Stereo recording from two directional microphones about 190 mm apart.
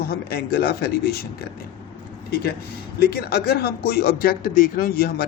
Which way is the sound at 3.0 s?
55° left (ahead or behind).